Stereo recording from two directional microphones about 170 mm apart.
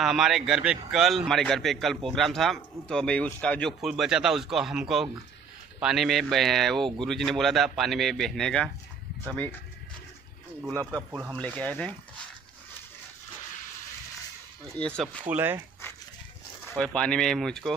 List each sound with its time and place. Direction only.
0.0 s speech: centre (ahead or behind)
10.6 s speech: 15° right (ahead or behind)
11.3 s speech: 5° left (ahead or behind)
14.8 s speech: 5° left (ahead or behind)
15.2 s speech: 10° right (ahead or behind)
16.6 s speech: 5° left (ahead or behind)